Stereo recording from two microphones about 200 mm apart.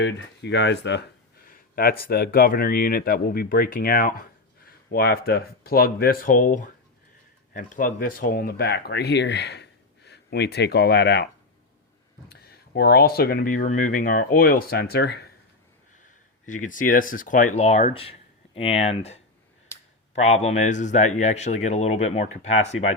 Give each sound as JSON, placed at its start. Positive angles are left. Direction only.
{"t": 0.0, "sound": "speech", "side_deg": 60}
{"t": 1.5, "sound": "speech", "side_deg": 45}
{"t": 12.3, "sound": "speech", "side_deg": 50}
{"t": 16.0, "sound": "speech", "side_deg": 40}
{"t": 19.7, "sound": "clicking", "side_deg": 15}
{"t": 20.1, "sound": "speech", "side_deg": 35}